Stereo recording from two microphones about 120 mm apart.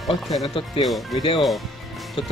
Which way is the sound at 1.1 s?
35° left (ahead or behind).